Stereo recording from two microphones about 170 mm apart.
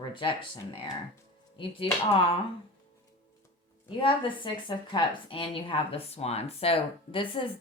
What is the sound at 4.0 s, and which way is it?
A woman's voice, 30° left (ahead or behind).